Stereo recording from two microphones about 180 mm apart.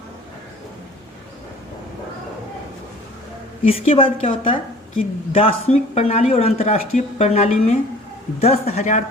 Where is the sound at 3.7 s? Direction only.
30° left (ahead or behind).